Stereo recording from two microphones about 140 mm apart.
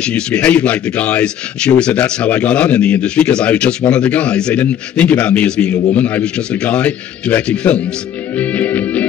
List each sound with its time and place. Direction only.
0.0 s speech: 10° left (ahead or behind)
8.4 s music: 10° left (ahead or behind)